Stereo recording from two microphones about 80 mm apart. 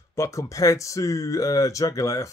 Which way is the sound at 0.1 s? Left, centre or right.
Left.